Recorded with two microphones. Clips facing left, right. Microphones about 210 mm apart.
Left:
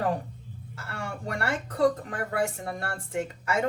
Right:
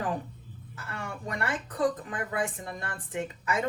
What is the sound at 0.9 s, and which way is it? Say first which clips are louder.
Speech: left 2 dB; 45° left (ahead or behind).